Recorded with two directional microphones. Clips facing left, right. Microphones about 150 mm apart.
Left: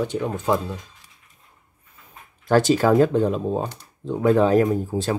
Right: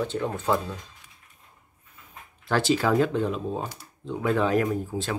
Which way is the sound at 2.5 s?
40° left (ahead or behind).